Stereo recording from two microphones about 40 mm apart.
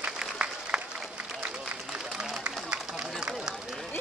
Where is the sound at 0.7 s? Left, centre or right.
Right.